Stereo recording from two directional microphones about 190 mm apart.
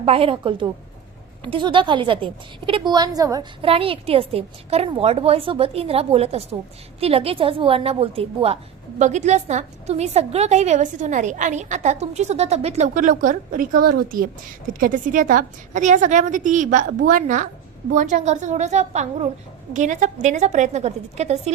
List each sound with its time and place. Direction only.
0.0 s a woman's voice: 30° right (ahead or behind)